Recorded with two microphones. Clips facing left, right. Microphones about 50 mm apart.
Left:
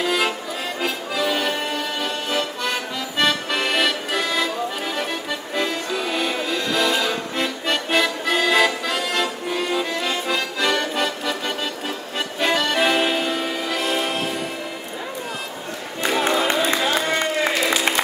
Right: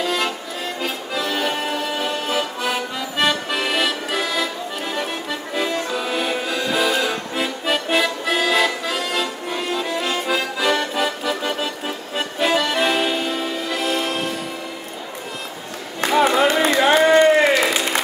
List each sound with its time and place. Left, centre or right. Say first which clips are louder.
0.0 s accordion: left 1 dB; centre
4.9 s music: even; centre
12.2 s accordion: right 2 dB; centre
16.1 s music: right 4 dB; centre
16.7 s a sound: right 7 dB; right